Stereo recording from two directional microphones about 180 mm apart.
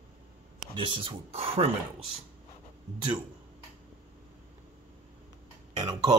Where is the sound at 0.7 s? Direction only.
30° right (ahead or behind).